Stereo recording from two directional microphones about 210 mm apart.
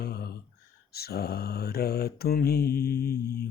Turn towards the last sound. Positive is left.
turn(degrees=45)  # may be behind; listen again after turning